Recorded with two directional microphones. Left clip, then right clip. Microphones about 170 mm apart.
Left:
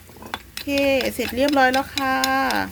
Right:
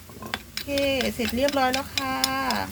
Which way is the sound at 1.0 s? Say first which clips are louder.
Left 3 dB; 85° left.